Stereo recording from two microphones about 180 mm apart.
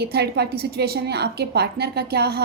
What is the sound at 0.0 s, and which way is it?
A woman's voice, 65° right (ahead or behind).